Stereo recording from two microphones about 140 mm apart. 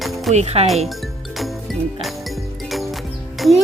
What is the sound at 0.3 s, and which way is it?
Speech, 50° right (ahead or behind).